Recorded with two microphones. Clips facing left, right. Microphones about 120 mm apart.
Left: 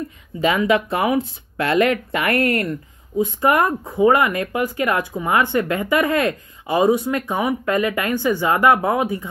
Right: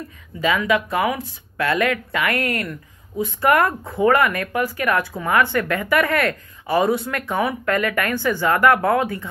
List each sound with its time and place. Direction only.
0.4 s speech: 25° left (ahead or behind)